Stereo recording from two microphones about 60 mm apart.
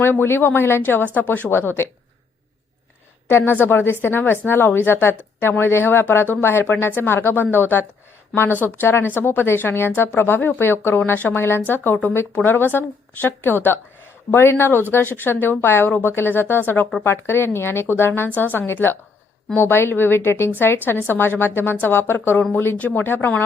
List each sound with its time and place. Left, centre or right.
0.0 s speech: left
3.2 s a woman's voice: left
22.8 s speech: left
23.0 s speech: left